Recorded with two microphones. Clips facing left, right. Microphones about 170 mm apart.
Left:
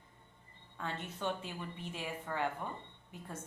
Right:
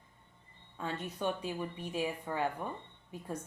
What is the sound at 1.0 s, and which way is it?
A woman's voice, 15° right (ahead or behind).